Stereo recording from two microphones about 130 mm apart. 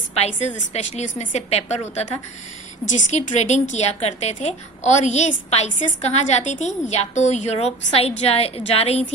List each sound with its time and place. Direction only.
0.2 s a woman's voice: 55° left (ahead or behind)